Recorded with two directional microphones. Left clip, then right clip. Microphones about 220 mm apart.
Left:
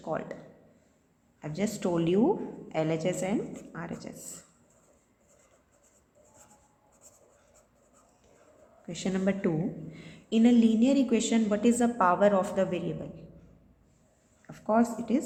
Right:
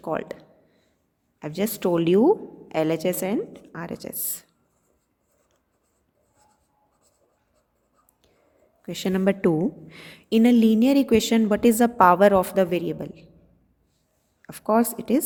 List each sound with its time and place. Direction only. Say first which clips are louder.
0.0 s a woman's voice: right 6 dB; 50° right (ahead or behind)
1.4 s a woman's voice: right 6 dB; 45° right (ahead or behind)
8.9 s a woman's voice: right 7 dB; 45° right (ahead or behind)
14.4 s a woman's voice: right 5 dB; 45° right (ahead or behind)